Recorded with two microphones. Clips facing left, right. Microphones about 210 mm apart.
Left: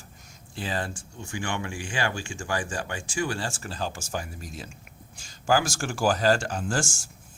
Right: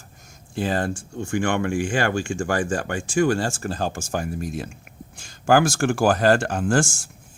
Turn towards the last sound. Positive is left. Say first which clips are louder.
# right 8 dB
turn(degrees=-55)  # may be behind; listen again after turning